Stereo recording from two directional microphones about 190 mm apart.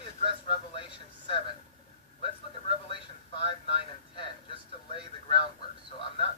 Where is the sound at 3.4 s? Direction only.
25° left (ahead or behind).